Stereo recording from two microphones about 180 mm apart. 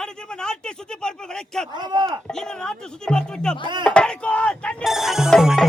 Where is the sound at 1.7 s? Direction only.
25° right (ahead or behind).